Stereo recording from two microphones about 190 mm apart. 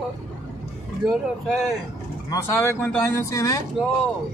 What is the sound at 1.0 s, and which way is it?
Mantra, centre (ahead or behind).